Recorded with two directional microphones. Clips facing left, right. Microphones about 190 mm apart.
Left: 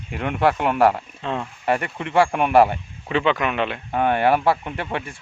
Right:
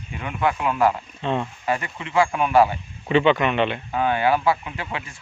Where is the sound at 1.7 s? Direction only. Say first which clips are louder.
Left 4 dB; 60° left (ahead or behind).